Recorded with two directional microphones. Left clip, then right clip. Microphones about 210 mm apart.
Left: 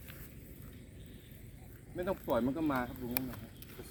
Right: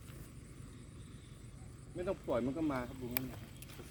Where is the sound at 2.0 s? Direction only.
45° left (ahead or behind).